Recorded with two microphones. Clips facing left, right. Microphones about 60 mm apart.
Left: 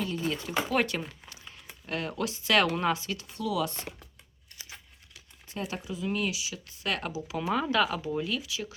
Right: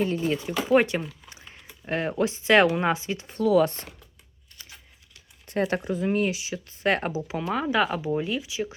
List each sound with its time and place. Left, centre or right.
0.3 s speech: right
1.3 s a sound: right
1.8 s speech: right
3.3 s speech: right
5.5 s speech: right
7.5 s speech: centre